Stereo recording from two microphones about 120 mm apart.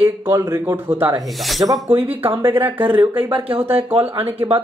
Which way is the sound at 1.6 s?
30° right (ahead or behind).